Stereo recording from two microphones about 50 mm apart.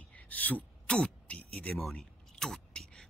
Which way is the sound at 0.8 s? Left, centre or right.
Centre.